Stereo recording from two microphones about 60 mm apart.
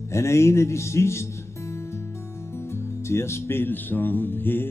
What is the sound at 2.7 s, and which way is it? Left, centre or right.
Speech, left.